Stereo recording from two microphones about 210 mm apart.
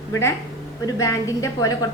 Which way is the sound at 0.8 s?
15° left (ahead or behind).